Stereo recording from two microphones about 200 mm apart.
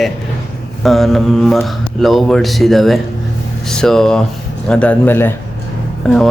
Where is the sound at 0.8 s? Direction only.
Centre (ahead or behind).